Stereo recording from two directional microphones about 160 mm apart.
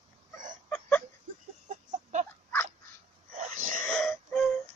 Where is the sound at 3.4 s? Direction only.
55° right (ahead or behind).